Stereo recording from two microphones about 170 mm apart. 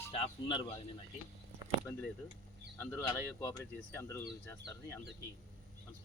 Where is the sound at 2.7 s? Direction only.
10° left (ahead or behind).